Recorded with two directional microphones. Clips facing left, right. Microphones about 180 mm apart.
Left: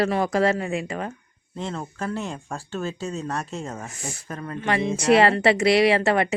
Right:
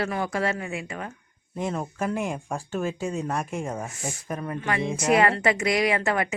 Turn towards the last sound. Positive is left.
turn(degrees=30)  # may be behind; listen again after turning